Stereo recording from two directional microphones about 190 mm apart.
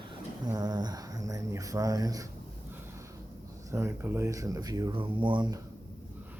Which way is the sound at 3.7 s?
15° right (ahead or behind).